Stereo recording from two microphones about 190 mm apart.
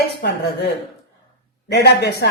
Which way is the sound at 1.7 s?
60° left (ahead or behind).